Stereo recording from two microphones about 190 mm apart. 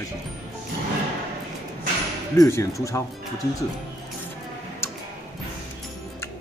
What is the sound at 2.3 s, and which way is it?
Speech, 15° left (ahead or behind).